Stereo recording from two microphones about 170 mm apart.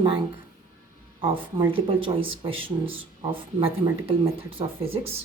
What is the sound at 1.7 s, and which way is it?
Speech, 30° right (ahead or behind).